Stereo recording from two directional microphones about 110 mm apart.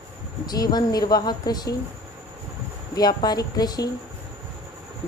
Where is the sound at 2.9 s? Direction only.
40° left (ahead or behind).